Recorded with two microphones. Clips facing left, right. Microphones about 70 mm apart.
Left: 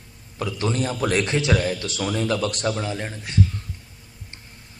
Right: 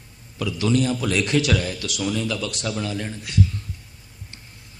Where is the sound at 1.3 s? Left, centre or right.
Left.